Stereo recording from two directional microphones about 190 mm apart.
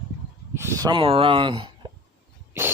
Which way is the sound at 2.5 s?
10° right (ahead or behind).